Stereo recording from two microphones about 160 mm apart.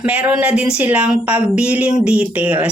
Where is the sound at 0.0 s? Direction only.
10° right (ahead or behind).